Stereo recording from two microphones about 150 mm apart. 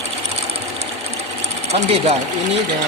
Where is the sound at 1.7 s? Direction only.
40° right (ahead or behind).